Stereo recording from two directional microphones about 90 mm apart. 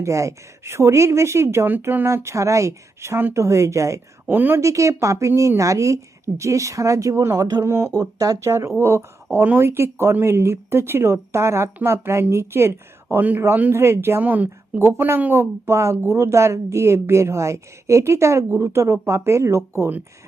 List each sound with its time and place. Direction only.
0.0 s a woman's voice: 35° right (ahead or behind)
4.3 s speech: 20° right (ahead or behind)
4.6 s a woman's voice: 35° right (ahead or behind)
7.6 s a woman's voice: 30° right (ahead or behind)
7.9 s a woman's voice: 40° right (ahead or behind)